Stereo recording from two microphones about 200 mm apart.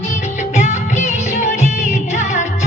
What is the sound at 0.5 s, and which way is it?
Music, 35° left (ahead or behind).